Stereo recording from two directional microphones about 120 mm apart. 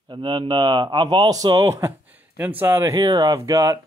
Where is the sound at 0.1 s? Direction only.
45° right (ahead or behind); by 2.9 s 20° right (ahead or behind).